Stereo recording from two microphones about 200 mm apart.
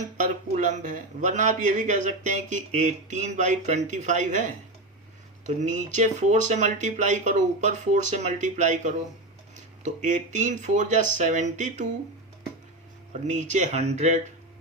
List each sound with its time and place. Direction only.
0.5 s a man's voice: 35° right (ahead or behind)
13.2 s a man's voice: 35° right (ahead or behind)